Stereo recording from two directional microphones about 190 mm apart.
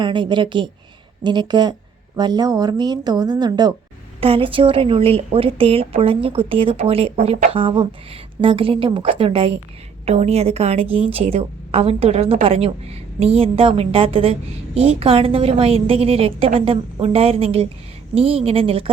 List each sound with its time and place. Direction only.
0.0 s a woman's voice: 25° right (ahead or behind)